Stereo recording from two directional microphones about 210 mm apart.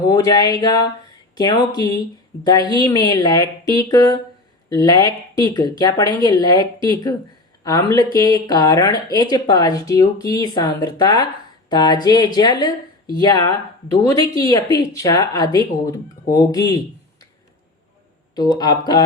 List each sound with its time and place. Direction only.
0.1 s a woman's voice: 20° left (ahead or behind)
18.3 s a woman's voice: 20° left (ahead or behind)